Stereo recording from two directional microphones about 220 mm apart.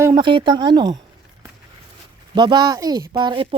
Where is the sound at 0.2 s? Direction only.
20° right (ahead or behind).